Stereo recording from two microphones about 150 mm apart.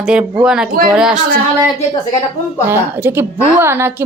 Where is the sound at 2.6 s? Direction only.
15° right (ahead or behind).